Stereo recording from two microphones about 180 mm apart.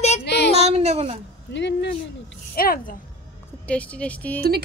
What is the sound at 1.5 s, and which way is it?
Speech, 75° left (ahead or behind).